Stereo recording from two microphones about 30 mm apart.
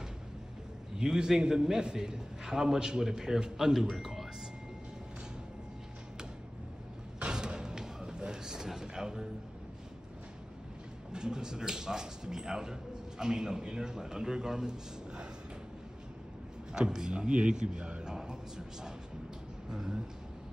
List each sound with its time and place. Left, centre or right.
0.9 s a man's voice: right
3.5 s speech: centre
7.2 s a sound: right
11.1 s a man's voice: right
16.7 s a man's voice: right
18.0 s a man's voice: right